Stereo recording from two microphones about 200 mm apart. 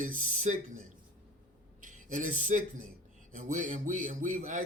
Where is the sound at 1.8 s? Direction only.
40° right (ahead or behind).